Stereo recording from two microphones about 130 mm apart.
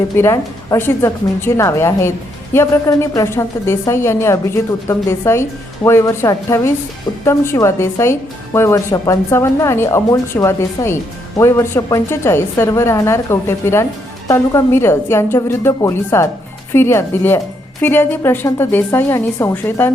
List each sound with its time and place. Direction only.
0.2 s a woman's voice: 20° left (ahead or behind)